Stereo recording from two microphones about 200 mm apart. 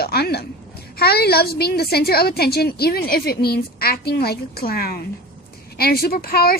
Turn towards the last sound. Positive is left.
turn(degrees=50)  # may be behind; listen again after turning